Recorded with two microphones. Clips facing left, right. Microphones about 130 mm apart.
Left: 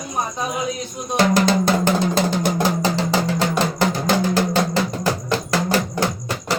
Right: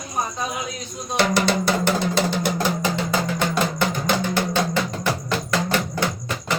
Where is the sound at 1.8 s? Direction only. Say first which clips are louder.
Left 2 dB; 40° left (ahead or behind).